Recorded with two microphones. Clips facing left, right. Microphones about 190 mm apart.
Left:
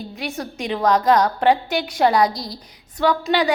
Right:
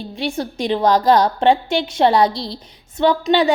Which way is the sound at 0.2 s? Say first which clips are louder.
Right 6 dB; 30° right (ahead or behind).